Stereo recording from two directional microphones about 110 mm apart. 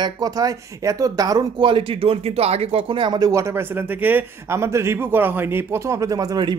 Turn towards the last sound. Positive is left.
turn(degrees=-40)  # may be behind; listen again after turning